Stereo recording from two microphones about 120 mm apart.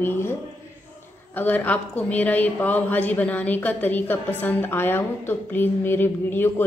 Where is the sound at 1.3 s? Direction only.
15° left (ahead or behind).